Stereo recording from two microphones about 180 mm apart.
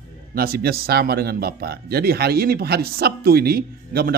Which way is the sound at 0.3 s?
55° right (ahead or behind).